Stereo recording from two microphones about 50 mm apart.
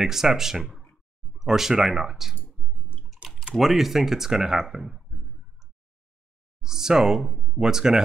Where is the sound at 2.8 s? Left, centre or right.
Centre.